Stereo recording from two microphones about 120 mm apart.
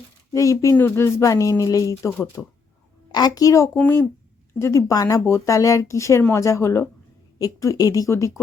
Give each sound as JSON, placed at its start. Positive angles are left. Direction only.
{"t": 0.3, "sound": "speech", "side_deg": 25}
{"t": 2.4, "sound": "speech", "side_deg": 10}
{"t": 3.1, "sound": "a woman's voice", "side_deg": 35}